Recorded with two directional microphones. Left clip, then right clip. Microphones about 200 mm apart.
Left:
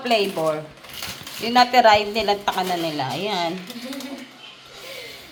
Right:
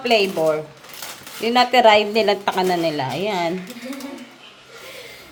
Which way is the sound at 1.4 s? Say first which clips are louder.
Right 1 dB; 25° right (ahead or behind).